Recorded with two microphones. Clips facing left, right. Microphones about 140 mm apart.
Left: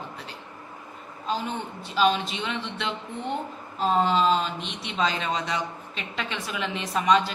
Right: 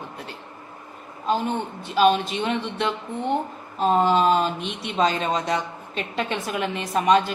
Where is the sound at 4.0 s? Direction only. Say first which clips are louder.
Right 3 dB; 55° right (ahead or behind).